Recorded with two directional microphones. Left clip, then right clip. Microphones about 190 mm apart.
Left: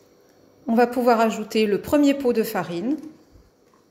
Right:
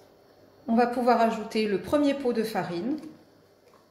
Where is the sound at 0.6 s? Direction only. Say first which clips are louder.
Left 5 dB; 50° left (ahead or behind).